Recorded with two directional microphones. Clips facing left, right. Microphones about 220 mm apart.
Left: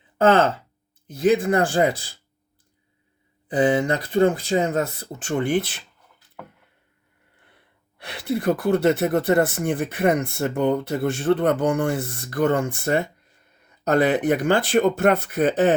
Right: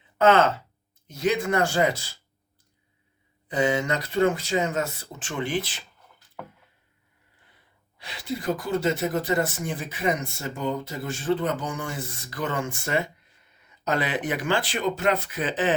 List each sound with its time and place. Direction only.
0.2 s speech: 30° left (ahead or behind)
3.5 s speech: 30° left (ahead or behind)
5.2 s speech: 45° left (ahead or behind)
7.9 s speech: 60° left (ahead or behind); by 13.0 s 40° left (ahead or behind)
13.8 s speech: 50° left (ahead or behind)